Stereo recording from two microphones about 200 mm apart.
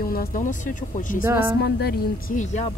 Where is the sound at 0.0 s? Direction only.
50° left (ahead or behind).